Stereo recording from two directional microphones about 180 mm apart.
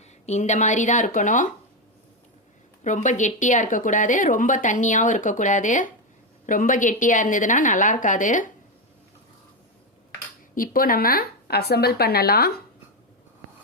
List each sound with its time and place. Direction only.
0.0 s a woman's voice: 40° left (ahead or behind)
2.8 s a woman's voice: 45° left (ahead or behind)
10.5 s speech: 50° left (ahead or behind)